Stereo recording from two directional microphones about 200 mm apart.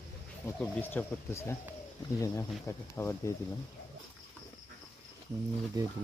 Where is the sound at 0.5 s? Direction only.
10° left (ahead or behind).